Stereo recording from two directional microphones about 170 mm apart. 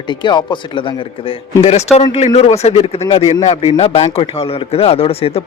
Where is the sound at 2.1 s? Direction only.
40° left (ahead or behind).